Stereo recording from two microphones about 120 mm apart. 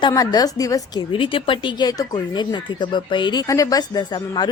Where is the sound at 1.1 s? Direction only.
45° left (ahead or behind).